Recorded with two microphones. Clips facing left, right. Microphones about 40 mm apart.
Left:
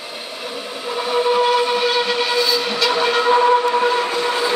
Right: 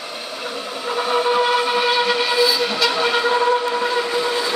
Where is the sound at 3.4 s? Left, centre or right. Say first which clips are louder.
Left 3 dB; centre.